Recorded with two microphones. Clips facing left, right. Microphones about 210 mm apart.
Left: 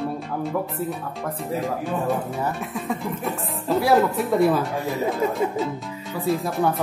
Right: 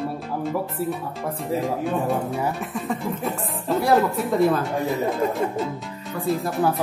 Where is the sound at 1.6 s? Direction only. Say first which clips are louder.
Right 1 dB; centre (ahead or behind).